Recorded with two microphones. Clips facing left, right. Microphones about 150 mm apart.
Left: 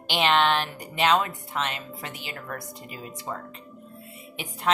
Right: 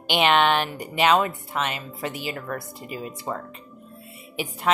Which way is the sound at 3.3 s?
35° right (ahead or behind).